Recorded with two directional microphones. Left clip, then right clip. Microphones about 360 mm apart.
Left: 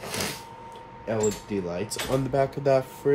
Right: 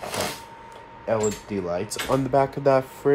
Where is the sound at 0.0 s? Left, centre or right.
Centre.